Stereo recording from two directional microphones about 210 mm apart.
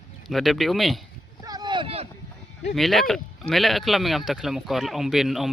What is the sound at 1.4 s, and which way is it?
Boat, 20° right (ahead or behind).